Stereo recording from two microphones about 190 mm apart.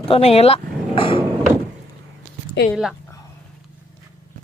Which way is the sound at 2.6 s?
65° left (ahead or behind).